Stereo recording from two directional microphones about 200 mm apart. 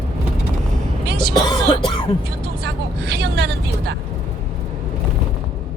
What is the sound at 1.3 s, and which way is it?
Speech, 20° left (ahead or behind).